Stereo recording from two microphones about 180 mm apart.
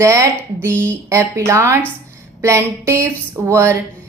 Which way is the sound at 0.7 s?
10° left (ahead or behind).